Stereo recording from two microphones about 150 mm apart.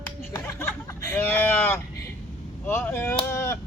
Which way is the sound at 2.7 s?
15° left (ahead or behind).